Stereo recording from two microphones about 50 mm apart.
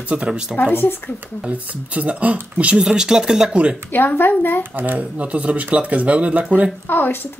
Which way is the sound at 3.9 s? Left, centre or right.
Left.